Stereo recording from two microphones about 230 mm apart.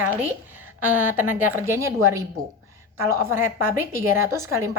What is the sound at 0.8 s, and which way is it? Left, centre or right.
A woman's voice, centre.